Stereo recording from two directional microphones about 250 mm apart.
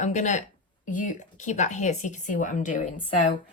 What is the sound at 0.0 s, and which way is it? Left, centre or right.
Speech, left.